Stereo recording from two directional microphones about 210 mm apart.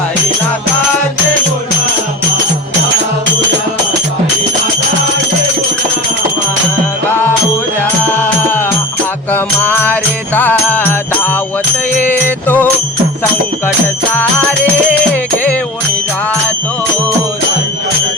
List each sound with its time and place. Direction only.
9.3 s music: 10° left (ahead or behind)